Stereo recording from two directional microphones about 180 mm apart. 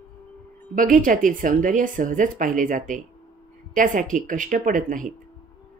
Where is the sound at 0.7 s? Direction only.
50° right (ahead or behind).